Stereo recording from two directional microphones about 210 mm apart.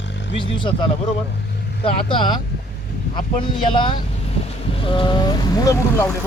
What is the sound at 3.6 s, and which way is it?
Speech, 25° left (ahead or behind).